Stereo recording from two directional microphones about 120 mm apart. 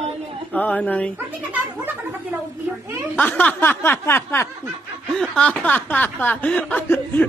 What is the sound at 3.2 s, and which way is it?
Speech, 15° left (ahead or behind).